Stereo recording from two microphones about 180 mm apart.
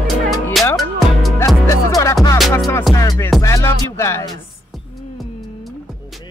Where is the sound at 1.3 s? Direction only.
15° left (ahead or behind).